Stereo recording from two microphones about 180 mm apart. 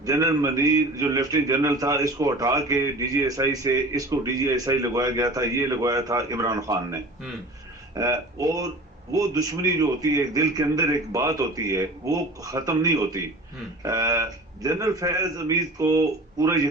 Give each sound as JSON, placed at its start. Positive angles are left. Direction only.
{"t": 0.0, "sound": "a man's voice", "side_deg": -20}